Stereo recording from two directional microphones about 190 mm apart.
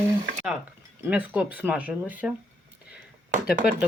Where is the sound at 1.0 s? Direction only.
10° right (ahead or behind).